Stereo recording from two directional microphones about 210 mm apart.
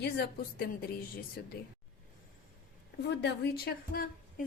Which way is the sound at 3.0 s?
50° left (ahead or behind).